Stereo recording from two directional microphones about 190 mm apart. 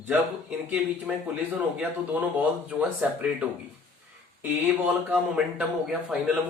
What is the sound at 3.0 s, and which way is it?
Speech, 5° right (ahead or behind).